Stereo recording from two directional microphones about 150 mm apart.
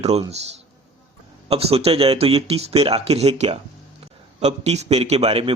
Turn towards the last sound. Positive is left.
turn(degrees=-40)  # may be behind; listen again after turning